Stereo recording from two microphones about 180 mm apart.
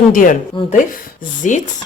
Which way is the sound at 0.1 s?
50° left (ahead or behind).